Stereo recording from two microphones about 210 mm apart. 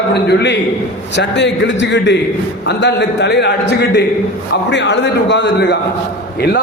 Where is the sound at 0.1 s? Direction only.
50° left (ahead or behind).